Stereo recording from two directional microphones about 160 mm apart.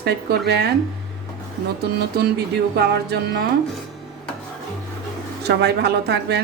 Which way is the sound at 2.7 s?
90° right.